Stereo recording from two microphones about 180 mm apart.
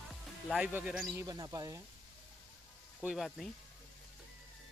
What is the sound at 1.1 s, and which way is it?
Speech, 20° right (ahead or behind).